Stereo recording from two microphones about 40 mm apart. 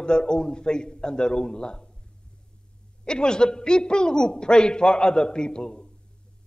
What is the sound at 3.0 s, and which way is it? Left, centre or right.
A man's voice, left.